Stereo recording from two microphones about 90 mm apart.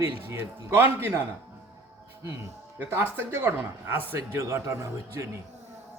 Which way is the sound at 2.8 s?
25° right (ahead or behind).